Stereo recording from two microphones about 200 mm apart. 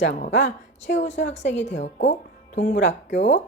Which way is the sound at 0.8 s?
65° left (ahead or behind).